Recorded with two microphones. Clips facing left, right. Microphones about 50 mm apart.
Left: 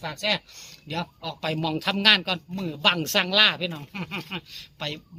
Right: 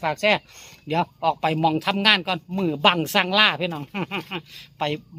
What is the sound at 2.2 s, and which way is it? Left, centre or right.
Speech, right.